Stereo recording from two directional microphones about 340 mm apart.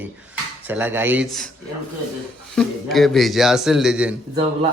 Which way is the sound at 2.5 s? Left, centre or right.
Centre.